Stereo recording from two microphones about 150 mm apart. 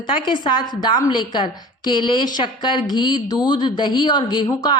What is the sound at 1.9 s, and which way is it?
A woman's voice, 30° left (ahead or behind).